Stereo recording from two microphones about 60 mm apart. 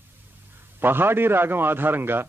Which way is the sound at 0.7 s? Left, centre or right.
Right.